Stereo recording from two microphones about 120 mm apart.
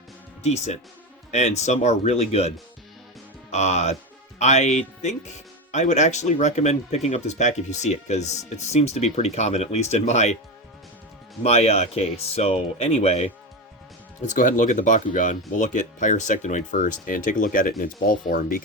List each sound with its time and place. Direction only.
0.4 s speech: 65° left (ahead or behind)
3.5 s speech: 70° left (ahead or behind)
11.4 s speech: 60° left (ahead or behind)
14.2 s speech: 90° left